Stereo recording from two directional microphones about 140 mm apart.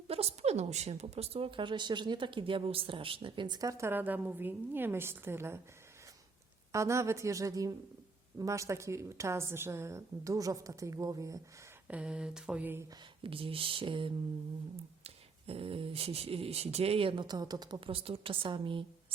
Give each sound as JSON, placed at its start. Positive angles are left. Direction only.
{"t": 0.1, "sound": "a woman's voice", "side_deg": -45}
{"t": 6.7, "sound": "a woman's voice", "side_deg": -20}
{"t": 11.9, "sound": "a sound", "side_deg": -5}
{"t": 13.2, "sound": "a woman's voice", "side_deg": -40}